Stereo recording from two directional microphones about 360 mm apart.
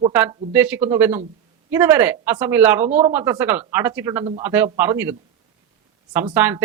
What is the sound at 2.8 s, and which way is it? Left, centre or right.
Speech, centre.